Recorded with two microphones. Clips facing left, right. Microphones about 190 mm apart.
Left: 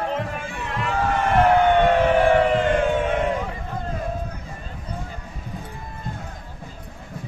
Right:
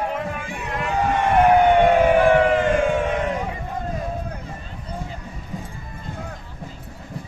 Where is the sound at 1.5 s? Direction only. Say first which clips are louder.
Right 3 dB; 15° right (ahead or behind).